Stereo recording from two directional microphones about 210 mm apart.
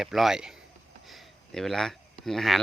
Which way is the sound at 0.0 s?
Centre (ahead or behind).